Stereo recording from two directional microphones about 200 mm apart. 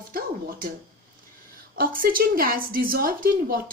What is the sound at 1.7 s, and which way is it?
A woman's voice, 45° right (ahead or behind).